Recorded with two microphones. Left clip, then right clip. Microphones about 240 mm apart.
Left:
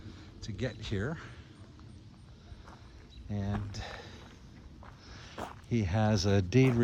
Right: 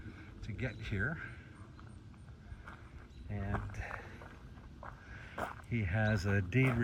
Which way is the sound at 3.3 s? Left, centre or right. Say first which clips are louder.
Left 5 dB; left.